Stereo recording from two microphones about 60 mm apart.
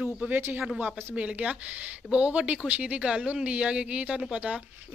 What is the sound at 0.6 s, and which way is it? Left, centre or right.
Speech, right.